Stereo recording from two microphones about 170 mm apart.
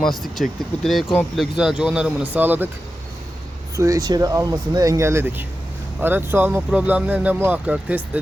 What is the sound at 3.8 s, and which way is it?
Speech, 20° right (ahead or behind).